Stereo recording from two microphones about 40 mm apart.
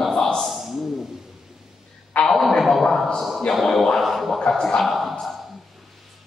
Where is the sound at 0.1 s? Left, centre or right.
Centre.